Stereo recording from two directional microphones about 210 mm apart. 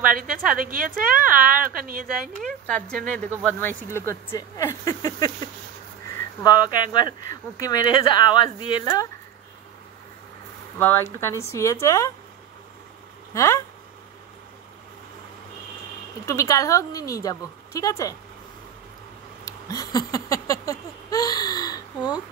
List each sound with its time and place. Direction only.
0.0 s a woman's voice: 40° right (ahead or behind)
2.4 s speech: 5° left (ahead or behind)
6.4 s speech: 20° left (ahead or behind)
10.8 s speech: 10° left (ahead or behind)
13.3 s speech: 15° left (ahead or behind)
16.3 s speech: 15° left (ahead or behind)
19.4 s a sound: 15° left (ahead or behind)